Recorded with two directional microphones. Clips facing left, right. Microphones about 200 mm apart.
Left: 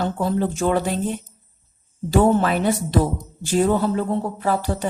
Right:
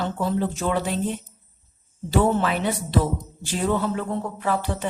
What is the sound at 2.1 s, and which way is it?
A woman's voice, 45° left (ahead or behind).